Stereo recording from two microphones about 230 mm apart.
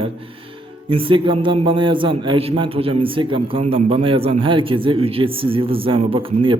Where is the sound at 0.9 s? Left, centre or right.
Right.